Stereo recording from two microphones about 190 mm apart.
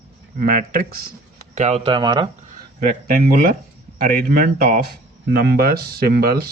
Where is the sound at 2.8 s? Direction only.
45° right (ahead or behind).